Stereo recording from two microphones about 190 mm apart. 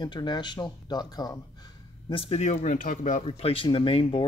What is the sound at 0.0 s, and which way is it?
Speech, 25° left (ahead or behind).